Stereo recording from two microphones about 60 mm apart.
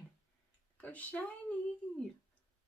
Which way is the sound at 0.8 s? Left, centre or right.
Left.